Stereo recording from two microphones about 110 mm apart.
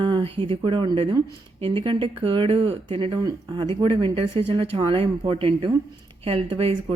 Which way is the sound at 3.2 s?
45° right (ahead or behind).